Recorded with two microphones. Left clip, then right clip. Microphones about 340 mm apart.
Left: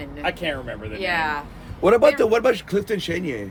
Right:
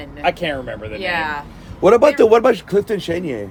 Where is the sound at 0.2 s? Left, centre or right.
Right.